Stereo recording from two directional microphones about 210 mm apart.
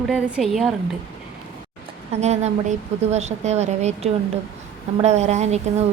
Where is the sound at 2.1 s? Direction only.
30° right (ahead or behind).